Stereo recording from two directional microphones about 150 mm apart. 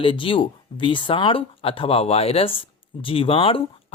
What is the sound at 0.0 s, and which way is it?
Speech, 35° left (ahead or behind).